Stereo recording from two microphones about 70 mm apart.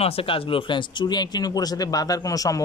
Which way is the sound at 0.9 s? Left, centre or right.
Left.